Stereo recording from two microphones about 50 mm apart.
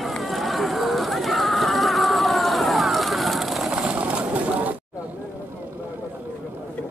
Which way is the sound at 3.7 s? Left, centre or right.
Right.